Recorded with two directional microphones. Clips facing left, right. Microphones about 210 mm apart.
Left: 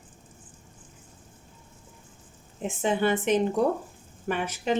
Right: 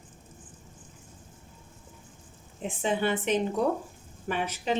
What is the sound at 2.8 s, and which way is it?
A woman's voice, 45° left (ahead or behind).